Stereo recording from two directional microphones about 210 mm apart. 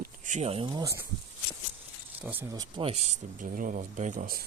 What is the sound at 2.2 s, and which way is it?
Speech, 10° right (ahead or behind).